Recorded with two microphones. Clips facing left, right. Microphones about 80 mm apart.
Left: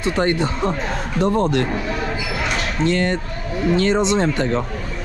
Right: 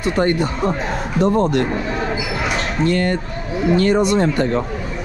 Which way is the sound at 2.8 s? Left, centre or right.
Left.